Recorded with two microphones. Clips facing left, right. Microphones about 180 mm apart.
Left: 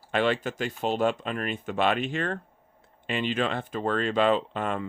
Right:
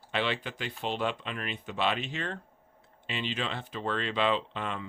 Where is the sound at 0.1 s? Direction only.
45° left (ahead or behind).